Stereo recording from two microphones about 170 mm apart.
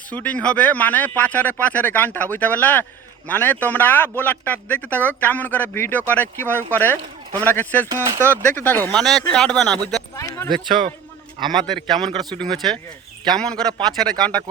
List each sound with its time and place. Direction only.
0.1 s a man's voice: 10° left (ahead or behind)
8.0 s speech: 15° right (ahead or behind)
8.4 s speech: 10° left (ahead or behind)
10.2 s speech: 15° left (ahead or behind)
10.7 s a man's voice: 30° right (ahead or behind)
11.6 s speech: 5° left (ahead or behind)